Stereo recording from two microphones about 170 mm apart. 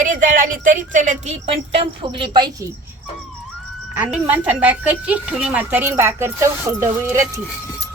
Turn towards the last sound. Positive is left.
turn(degrees=-15)  # may be behind; listen again after turning